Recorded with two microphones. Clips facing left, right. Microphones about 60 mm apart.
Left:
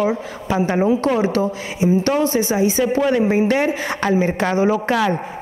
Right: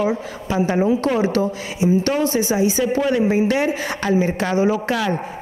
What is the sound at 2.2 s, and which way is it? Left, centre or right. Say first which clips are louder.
A woman's voice: left 1 dB; left.